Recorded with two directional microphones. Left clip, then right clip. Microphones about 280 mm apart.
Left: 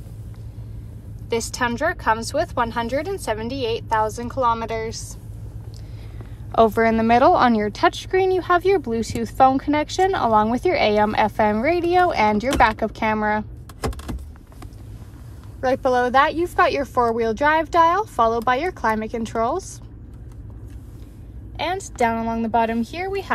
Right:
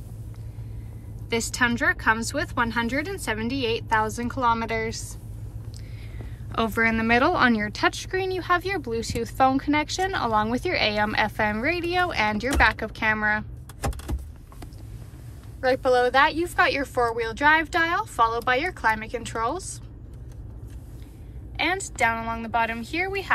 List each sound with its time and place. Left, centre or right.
1.3 s a woman's voice: centre
6.1 s speech: centre
16.4 s speech: left
21.5 s speech: centre